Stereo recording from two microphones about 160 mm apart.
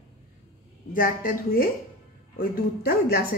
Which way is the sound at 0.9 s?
60° left (ahead or behind).